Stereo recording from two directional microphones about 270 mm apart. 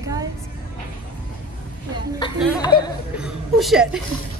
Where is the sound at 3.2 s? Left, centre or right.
Centre.